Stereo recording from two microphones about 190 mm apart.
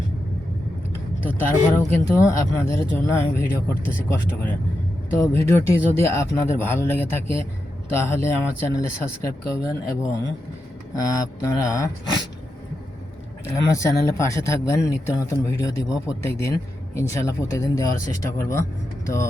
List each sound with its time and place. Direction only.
1.4 s a man's voice: 10° left (ahead or behind)
13.6 s a man's voice: 15° left (ahead or behind)